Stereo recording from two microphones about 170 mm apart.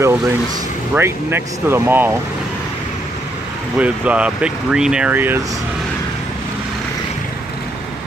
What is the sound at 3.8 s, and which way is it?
Speech, 10° right (ahead or behind).